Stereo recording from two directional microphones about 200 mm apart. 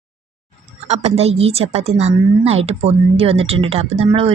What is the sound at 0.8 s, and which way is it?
Speech, 30° right (ahead or behind).